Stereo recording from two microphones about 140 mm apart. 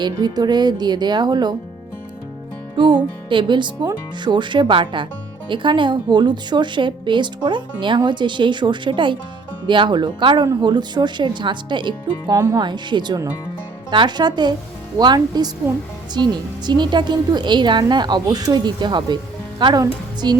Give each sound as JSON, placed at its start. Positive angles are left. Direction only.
{"t": 0.0, "sound": "a woman's voice", "side_deg": -30}
{"t": 2.7, "sound": "a woman's voice", "side_deg": -35}